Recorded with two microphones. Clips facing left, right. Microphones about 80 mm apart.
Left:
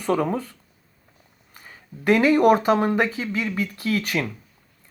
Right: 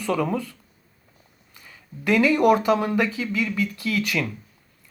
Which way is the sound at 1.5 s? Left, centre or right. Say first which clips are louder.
Left 1 dB; left.